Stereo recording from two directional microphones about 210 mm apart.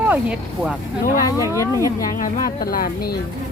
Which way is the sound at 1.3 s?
15° left (ahead or behind).